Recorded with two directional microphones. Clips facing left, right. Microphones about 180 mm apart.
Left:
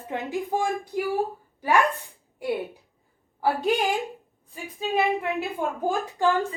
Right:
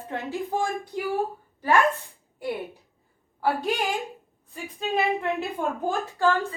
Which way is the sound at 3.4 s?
15° left (ahead or behind).